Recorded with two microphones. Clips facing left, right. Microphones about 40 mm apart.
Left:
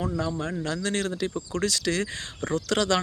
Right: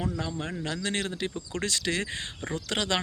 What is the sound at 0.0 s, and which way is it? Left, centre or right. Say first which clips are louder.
Speech: left 4 dB; right.